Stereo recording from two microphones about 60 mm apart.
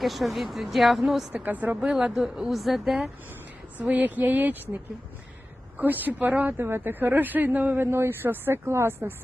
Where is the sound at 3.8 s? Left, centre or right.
Right.